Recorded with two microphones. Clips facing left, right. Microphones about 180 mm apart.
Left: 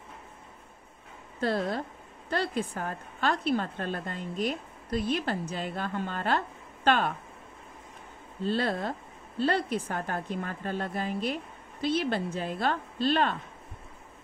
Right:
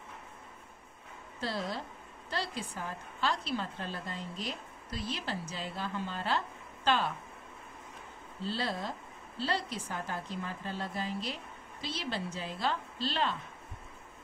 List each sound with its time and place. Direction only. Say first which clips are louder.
1.4 s a woman's voice: left 7 dB; 55° left (ahead or behind)
8.5 s a woman's voice: left 7 dB; 55° left (ahead or behind)